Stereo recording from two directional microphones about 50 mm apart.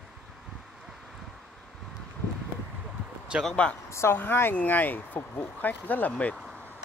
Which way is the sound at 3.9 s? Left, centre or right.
Left.